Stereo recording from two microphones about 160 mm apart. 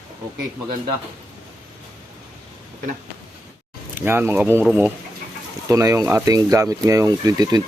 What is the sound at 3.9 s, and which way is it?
Speech, 10° right (ahead or behind).